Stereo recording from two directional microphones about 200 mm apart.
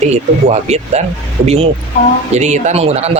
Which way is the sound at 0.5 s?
35° right (ahead or behind).